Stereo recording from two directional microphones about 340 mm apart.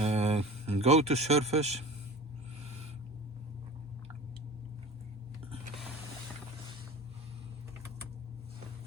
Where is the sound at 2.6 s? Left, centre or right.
Centre.